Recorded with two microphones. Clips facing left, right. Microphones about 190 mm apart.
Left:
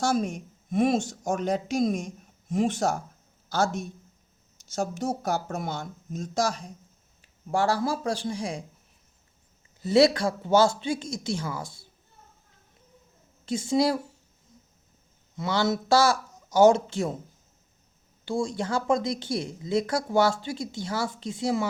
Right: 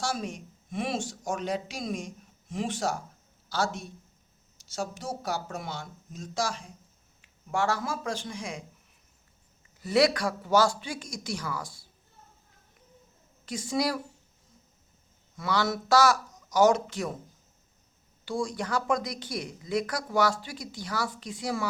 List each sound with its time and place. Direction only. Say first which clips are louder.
0.0 s a man's voice: left 7 dB; 45° left (ahead or behind)
9.8 s speech: left 4 dB; 25° left (ahead or behind)
13.4 s a woman's voice: left 5 dB; 25° left (ahead or behind)
15.4 s speech: left 3 dB; 25° left (ahead or behind)
18.3 s speech: left 3 dB; 25° left (ahead or behind)